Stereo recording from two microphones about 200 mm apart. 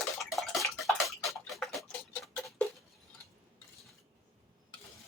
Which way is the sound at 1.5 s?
Centre (ahead or behind).